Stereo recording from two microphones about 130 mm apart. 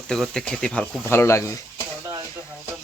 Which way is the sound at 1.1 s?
20° left (ahead or behind).